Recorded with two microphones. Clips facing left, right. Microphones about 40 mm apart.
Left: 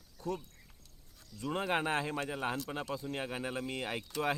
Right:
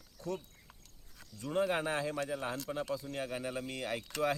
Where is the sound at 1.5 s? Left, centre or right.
Left.